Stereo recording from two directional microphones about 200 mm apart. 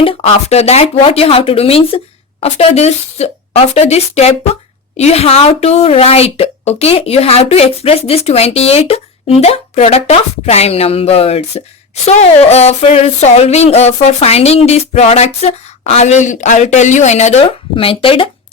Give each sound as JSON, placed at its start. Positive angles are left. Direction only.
{"t": 0.0, "sound": "speech", "side_deg": 25}